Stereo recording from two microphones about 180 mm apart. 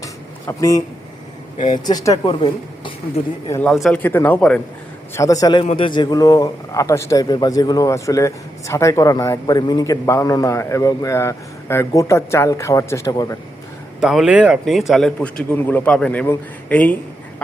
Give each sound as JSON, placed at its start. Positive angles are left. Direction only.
{"t": 0.0, "sound": "a sound", "side_deg": 15}
{"t": 1.5, "sound": "speech", "side_deg": 45}
{"t": 1.8, "sound": "speech", "side_deg": 20}
{"t": 3.5, "sound": "a man's voice", "side_deg": 5}
{"t": 5.1, "sound": "a man's voice", "side_deg": 20}
{"t": 14.0, "sound": "a man's voice", "side_deg": 0}